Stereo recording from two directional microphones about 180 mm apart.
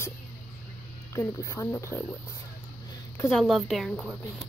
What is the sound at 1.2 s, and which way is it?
Speech, 15° left (ahead or behind).